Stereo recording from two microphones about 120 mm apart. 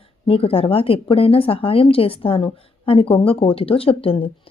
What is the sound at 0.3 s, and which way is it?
A woman's voice, 50° left (ahead or behind).